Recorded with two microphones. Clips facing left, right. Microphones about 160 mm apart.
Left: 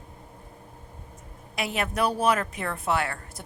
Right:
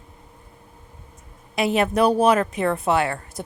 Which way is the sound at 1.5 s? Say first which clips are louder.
Right 9 dB; 25° right (ahead or behind).